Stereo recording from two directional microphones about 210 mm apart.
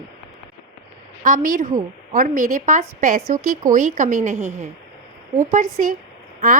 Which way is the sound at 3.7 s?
40° right (ahead or behind).